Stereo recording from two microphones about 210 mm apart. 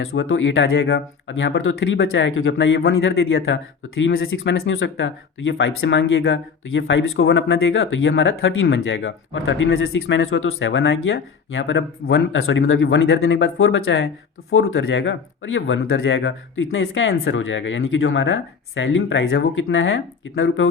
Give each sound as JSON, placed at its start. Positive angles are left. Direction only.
{"t": 0.0, "sound": "speech", "side_deg": 70}
{"t": 4.0, "sound": "speech", "side_deg": 45}
{"t": 4.3, "sound": "speech", "side_deg": 70}